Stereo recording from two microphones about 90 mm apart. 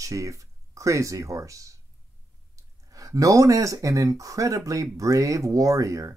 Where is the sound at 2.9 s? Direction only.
40° right (ahead or behind).